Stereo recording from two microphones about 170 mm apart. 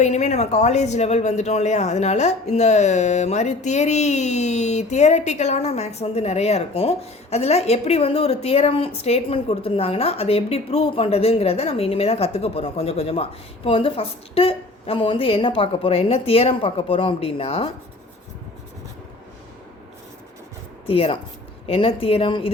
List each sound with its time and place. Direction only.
0.0 s speech: 40° left (ahead or behind)
20.8 s speech: 35° left (ahead or behind)